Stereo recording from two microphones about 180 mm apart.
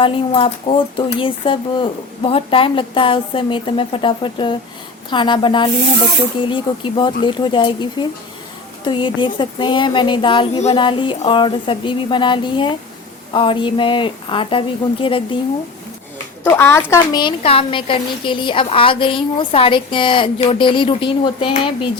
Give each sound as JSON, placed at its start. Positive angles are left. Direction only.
{"t": 0.0, "sound": "a woman's voice", "side_deg": 30}
{"t": 16.4, "sound": "a woman's voice", "side_deg": 15}